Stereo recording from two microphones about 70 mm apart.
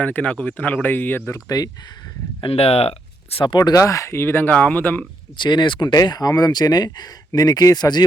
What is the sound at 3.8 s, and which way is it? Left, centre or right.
Speech, left.